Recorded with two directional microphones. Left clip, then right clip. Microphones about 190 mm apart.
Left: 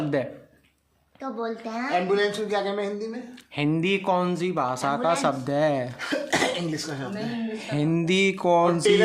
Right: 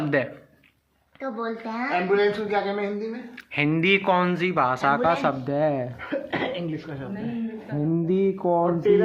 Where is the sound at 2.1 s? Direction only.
50° left (ahead or behind).